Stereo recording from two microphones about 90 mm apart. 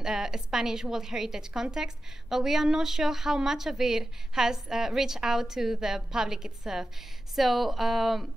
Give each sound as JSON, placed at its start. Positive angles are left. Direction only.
{"t": 0.0, "sound": "a woman's voice", "side_deg": -5}